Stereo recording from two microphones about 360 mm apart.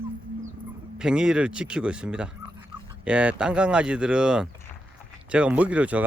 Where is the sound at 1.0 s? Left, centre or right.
Centre.